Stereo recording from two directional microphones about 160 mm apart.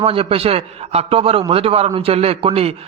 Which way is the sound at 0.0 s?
35° right (ahead or behind).